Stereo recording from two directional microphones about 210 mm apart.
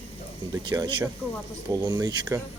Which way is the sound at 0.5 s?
20° right (ahead or behind).